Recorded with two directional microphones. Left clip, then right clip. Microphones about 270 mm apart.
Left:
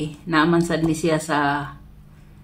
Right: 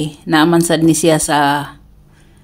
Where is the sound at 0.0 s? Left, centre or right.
Right.